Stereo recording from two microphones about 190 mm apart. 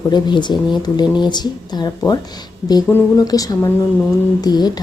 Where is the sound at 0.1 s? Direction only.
25° left (ahead or behind).